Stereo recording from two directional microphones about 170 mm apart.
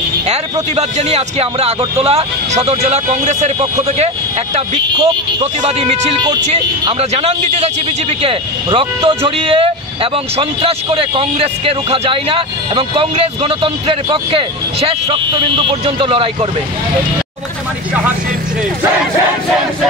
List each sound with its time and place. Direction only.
0.3 s speech: 40° right (ahead or behind)
7.2 s speech: 35° right (ahead or behind)